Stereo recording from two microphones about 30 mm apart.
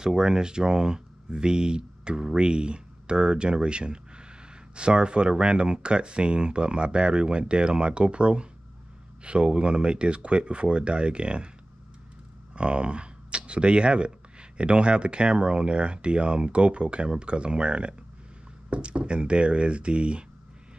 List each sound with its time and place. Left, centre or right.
0.0 s speech: right
12.5 s speech: right